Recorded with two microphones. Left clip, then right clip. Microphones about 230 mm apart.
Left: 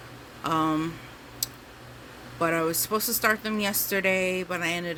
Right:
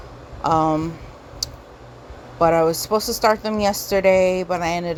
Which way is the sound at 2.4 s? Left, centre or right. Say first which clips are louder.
Right 10 dB; centre.